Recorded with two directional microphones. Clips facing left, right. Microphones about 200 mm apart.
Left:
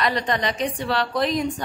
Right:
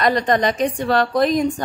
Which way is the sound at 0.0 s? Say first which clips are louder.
Right 6 dB; 45° right (ahead or behind).